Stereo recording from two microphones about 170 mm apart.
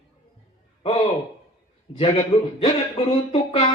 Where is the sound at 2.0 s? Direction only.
35° left (ahead or behind).